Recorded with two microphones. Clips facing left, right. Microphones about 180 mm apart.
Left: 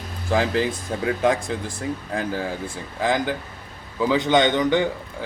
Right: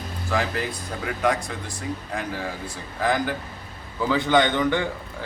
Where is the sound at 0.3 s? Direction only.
25° left (ahead or behind).